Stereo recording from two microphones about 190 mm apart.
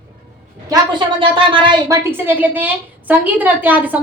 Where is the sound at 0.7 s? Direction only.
25° right (ahead or behind).